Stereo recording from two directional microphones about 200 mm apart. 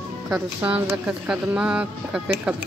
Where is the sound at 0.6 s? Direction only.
10° right (ahead or behind).